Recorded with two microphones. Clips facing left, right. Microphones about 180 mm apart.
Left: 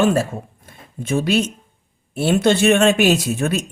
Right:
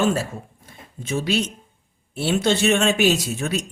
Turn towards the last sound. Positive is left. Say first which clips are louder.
# left 5 dB
turn(degrees=55)  # may be behind; listen again after turning